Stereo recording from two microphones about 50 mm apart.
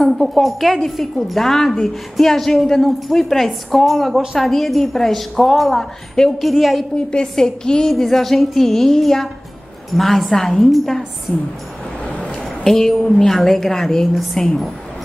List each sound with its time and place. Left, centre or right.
0.2 s a woman's voice: centre
4.1 s speech: centre
4.4 s a woman's voice: centre
6.3 s a woman's voice: centre
7.0 s a woman's voice: centre
12.0 s a sound: left
12.4 s a woman's voice: centre